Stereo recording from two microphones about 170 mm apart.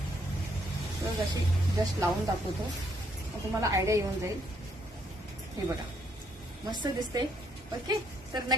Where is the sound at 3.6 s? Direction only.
20° right (ahead or behind).